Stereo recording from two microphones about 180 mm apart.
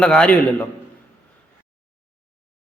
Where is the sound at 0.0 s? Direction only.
5° left (ahead or behind).